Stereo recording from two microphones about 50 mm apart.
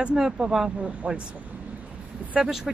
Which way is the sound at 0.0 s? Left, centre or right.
Centre.